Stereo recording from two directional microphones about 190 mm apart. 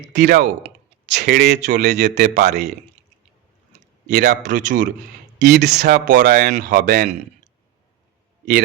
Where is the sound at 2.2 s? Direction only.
40° right (ahead or behind).